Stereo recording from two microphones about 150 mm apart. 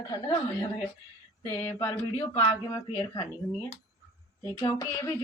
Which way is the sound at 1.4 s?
20° left (ahead or behind).